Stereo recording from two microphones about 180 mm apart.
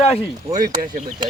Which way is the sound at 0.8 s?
40° right (ahead or behind).